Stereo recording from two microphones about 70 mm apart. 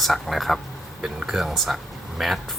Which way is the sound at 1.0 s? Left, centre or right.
Centre.